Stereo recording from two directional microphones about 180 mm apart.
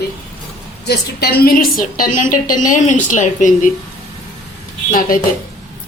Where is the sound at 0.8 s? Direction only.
60° left (ahead or behind); by 3.7 s 45° left (ahead or behind).